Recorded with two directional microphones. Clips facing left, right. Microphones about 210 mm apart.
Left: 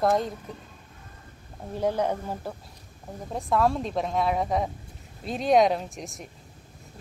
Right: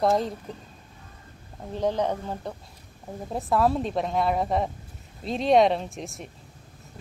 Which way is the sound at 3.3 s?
Centre (ahead or behind).